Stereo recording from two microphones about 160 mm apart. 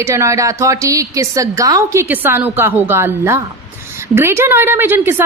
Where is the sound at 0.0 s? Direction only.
20° right (ahead or behind).